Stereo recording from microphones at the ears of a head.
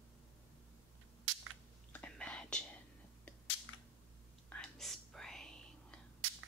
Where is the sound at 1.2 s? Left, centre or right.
Right.